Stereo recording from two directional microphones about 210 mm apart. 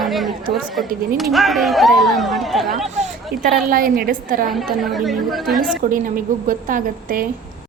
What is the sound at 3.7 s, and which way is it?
Speech, 45° right (ahead or behind).